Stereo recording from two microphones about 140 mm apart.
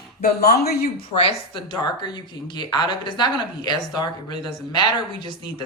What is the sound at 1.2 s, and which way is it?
Speech, 35° left (ahead or behind).